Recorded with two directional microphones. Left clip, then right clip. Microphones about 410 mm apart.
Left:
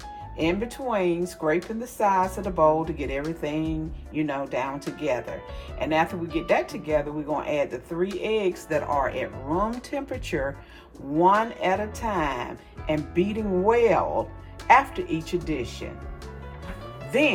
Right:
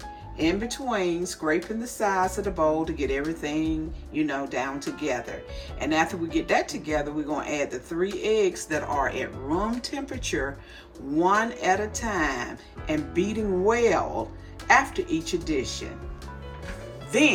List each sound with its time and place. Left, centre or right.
0.4 s speech: centre
17.1 s speech: centre